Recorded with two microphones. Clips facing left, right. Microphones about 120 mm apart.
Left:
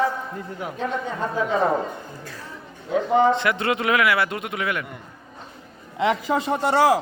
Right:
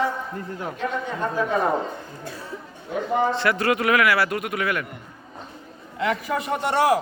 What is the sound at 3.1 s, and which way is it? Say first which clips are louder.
A man's voice: left 3 dB; 20° left (ahead or behind).